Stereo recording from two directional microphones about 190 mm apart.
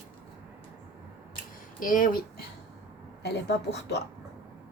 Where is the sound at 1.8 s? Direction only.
45° left (ahead or behind).